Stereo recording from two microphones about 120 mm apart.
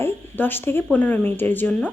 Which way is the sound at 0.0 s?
15° left (ahead or behind).